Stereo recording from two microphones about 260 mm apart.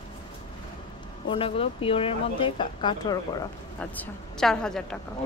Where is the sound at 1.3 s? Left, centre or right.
Left; by 4.8 s centre.